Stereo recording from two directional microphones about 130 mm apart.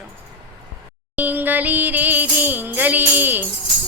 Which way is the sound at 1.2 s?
15° right (ahead or behind).